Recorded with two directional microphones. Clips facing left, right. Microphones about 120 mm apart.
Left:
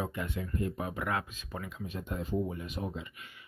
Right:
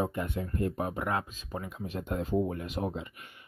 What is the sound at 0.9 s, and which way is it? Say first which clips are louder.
Speech: right 2 dB; 30° right (ahead or behind).